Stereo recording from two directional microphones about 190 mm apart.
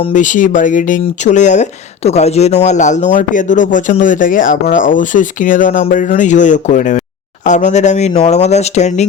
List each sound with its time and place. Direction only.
0.1 s speech: 40° left (ahead or behind)